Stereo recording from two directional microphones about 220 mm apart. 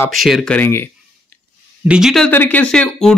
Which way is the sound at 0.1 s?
Centre (ahead or behind).